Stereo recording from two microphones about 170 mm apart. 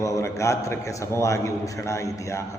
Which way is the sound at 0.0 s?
20° left (ahead or behind).